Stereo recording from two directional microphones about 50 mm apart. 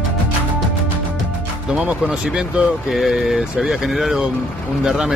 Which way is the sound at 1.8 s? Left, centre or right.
Centre.